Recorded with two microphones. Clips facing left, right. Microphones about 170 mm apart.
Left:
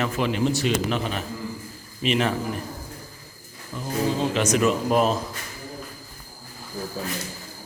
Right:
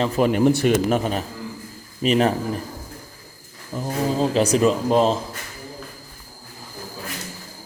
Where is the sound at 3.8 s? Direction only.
35° right (ahead or behind).